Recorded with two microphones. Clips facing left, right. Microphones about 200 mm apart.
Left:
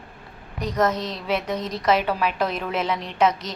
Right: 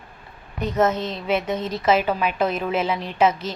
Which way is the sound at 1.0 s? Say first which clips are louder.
Right 2 dB; 30° right (ahead or behind).